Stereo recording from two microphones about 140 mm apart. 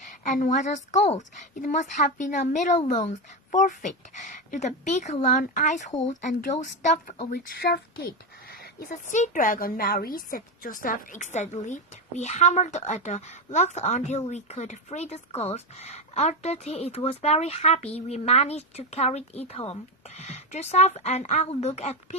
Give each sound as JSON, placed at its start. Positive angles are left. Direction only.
{"t": 0.1, "sound": "speech", "side_deg": 65}
{"t": 7.3, "sound": "speech", "side_deg": 90}